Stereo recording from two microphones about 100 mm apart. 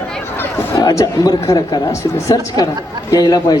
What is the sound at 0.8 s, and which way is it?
A man's voice, 35° left (ahead or behind).